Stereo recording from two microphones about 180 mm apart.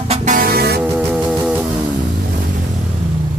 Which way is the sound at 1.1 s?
5° right (ahead or behind).